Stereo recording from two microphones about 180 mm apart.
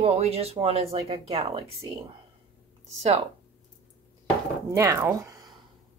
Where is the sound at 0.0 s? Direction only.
35° right (ahead or behind).